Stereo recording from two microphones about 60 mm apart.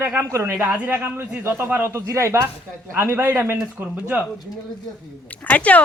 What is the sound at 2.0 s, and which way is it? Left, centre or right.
Speech, right.